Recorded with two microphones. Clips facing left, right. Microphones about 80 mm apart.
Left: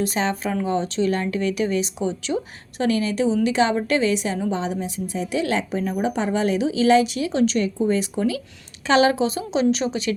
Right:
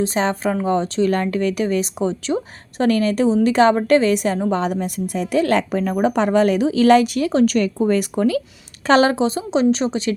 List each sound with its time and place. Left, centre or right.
0.0 s a woman's voice: right
5.4 s a woman's voice: right